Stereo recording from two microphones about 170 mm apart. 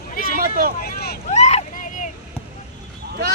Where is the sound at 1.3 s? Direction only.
40° left (ahead or behind).